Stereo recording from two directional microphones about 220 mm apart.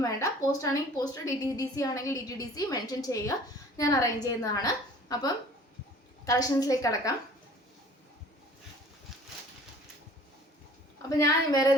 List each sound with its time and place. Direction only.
0.2 s a woman's voice: 15° left (ahead or behind)
11.2 s a woman's voice: 15° left (ahead or behind)